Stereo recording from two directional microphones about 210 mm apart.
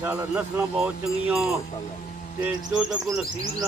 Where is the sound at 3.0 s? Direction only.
15° right (ahead or behind).